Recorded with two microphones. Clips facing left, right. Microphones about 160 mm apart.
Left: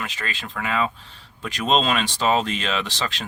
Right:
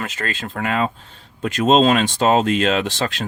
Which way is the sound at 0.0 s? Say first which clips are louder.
Right 5 dB; 45° right (ahead or behind).